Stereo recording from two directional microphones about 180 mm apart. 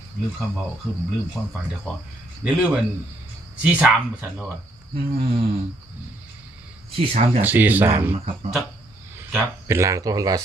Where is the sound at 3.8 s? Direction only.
10° right (ahead or behind).